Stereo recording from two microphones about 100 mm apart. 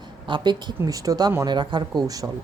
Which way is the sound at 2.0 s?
35° right (ahead or behind).